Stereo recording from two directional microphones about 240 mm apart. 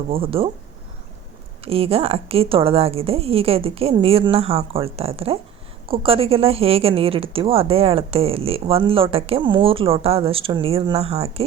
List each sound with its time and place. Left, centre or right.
0.1 s a woman's voice: right
1.6 s a woman's voice: right